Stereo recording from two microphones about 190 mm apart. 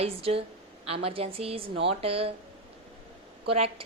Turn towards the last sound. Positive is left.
turn(degrees=-30)  # may be behind; listen again after turning